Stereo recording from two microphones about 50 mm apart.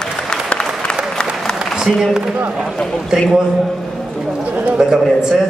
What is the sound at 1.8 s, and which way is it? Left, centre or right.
Speech, centre.